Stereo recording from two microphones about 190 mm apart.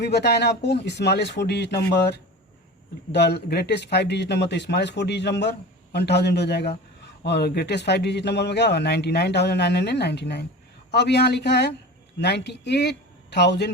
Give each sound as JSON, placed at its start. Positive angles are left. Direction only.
{"t": 0.0, "sound": "a man's voice", "side_deg": 60}